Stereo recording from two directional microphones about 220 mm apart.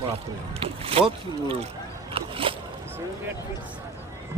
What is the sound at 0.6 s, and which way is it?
Speech, 25° right (ahead or behind).